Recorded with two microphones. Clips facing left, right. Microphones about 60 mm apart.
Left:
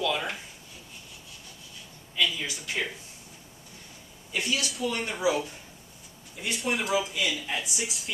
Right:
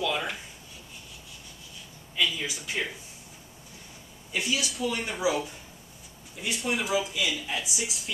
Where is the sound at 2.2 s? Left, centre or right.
Centre.